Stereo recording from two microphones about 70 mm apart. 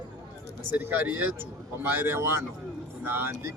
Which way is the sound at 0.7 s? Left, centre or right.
Right.